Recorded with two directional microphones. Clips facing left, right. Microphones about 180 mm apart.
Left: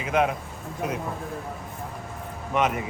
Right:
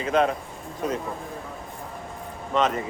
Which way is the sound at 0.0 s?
10° left (ahead or behind).